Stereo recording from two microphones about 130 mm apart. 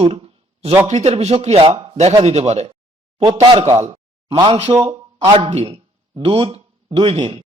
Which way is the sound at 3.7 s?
55° right (ahead or behind).